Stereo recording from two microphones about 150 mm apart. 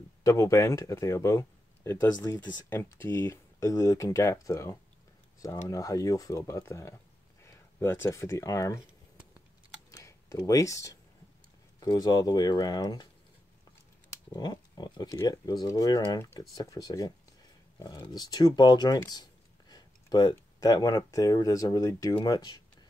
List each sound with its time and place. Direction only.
0.2 s speech: 20° left (ahead or behind)
9.8 s computer keyboard: 20° left (ahead or behind)
11.8 s speech: 25° left (ahead or behind)
14.3 s speech: 25° left (ahead or behind)